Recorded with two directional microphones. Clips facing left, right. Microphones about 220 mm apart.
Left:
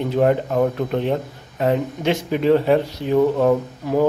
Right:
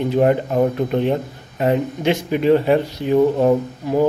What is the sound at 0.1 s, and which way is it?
Speech, 10° right (ahead or behind).